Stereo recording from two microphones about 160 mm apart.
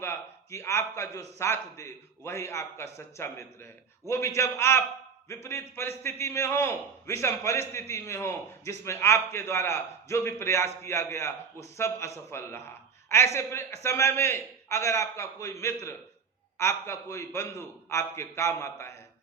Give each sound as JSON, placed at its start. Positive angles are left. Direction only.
{"t": 0.0, "sound": "a man's voice", "side_deg": 15}